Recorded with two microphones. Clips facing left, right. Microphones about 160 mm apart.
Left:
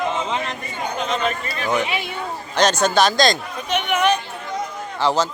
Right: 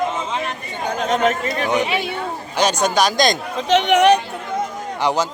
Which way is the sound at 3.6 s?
90° right.